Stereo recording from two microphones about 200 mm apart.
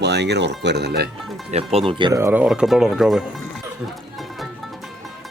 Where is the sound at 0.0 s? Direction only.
60° right (ahead or behind).